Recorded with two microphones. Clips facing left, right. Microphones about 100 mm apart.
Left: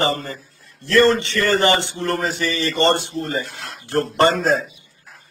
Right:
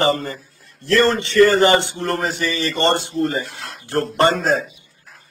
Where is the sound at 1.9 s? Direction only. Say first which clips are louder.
Even; 35° right (ahead or behind).